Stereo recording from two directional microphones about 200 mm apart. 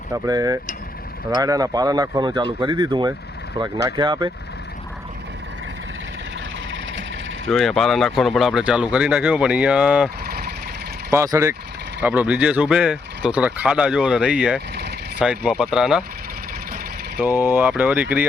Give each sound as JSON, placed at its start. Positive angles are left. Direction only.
{"t": 0.1, "sound": "speech", "side_deg": -20}
{"t": 7.5, "sound": "speech", "side_deg": 0}
{"t": 10.2, "sound": "vehicle", "side_deg": -50}
{"t": 11.1, "sound": "speech", "side_deg": -15}
{"t": 17.2, "sound": "speech", "side_deg": -10}